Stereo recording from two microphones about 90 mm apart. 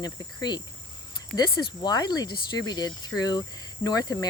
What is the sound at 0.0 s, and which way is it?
Speech, 45° left (ahead or behind).